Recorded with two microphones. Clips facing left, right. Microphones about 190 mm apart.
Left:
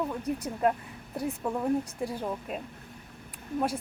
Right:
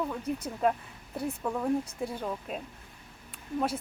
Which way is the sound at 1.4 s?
10° left (ahead or behind).